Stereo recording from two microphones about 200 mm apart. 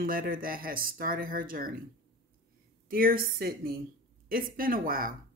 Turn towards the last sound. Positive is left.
turn(degrees=-45)  # may be behind; listen again after turning